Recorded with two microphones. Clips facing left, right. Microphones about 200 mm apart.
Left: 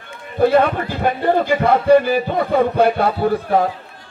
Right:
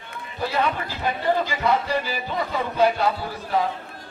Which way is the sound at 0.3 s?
55° left (ahead or behind).